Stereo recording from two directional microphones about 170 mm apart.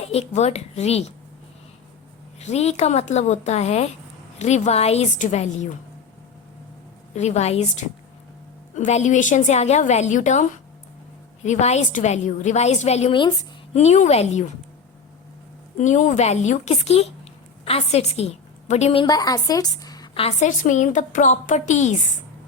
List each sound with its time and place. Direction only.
0.0 s a woman's voice: 40° left (ahead or behind)
2.4 s a woman's voice: 40° left (ahead or behind)
7.1 s a woman's voice: 40° left (ahead or behind)
11.4 s a woman's voice: 40° left (ahead or behind)
13.7 s a woman's voice: 40° left (ahead or behind)
15.8 s a woman's voice: 45° left (ahead or behind)
19.0 s a woman's voice: 20° left (ahead or behind)
20.2 s a woman's voice: 45° left (ahead or behind)